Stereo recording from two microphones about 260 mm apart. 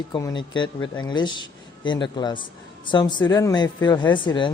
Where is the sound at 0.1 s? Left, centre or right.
Centre.